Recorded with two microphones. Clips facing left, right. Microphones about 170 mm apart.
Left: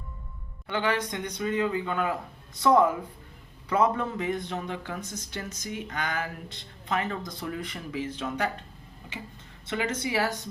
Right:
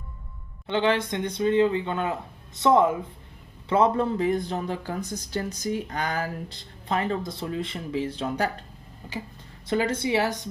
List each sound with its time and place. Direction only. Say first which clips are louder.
0.7 s speech: right 5 dB; 25° right (ahead or behind)
9.6 s speech: right 5 dB; 35° right (ahead or behind)